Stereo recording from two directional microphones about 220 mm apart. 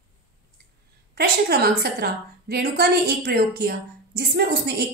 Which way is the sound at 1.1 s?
45° right (ahead or behind).